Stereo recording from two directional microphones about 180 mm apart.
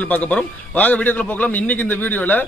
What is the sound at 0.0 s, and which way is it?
A man's voice, 10° left (ahead or behind).